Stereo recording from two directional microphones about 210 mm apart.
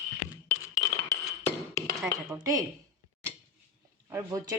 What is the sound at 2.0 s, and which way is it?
Speech, 10° right (ahead or behind).